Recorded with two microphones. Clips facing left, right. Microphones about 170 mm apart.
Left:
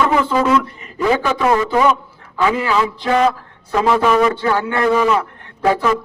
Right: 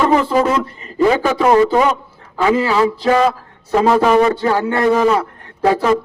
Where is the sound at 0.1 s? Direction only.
35° right (ahead or behind).